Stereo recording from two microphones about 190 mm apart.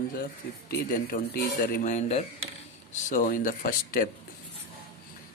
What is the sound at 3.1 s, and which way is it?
Speech, 45° left (ahead or behind).